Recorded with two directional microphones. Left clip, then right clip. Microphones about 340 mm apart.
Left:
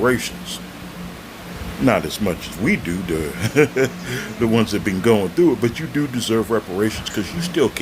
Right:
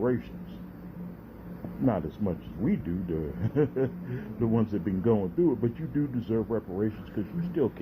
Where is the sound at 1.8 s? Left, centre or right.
Centre.